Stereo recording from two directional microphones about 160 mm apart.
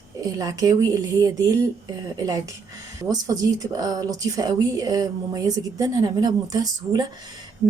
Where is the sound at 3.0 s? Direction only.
20° right (ahead or behind).